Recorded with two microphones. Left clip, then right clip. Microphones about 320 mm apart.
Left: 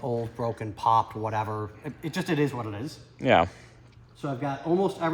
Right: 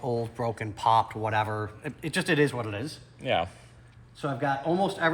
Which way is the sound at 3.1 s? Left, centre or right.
Left.